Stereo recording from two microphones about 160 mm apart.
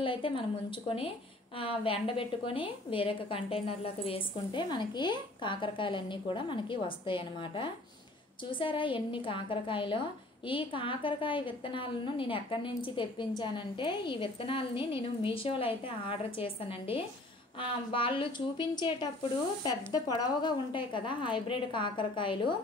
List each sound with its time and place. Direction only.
0.0 s a woman's voice: 30° left (ahead or behind)